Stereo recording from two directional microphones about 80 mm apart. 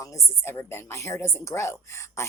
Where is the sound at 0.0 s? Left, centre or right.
Left.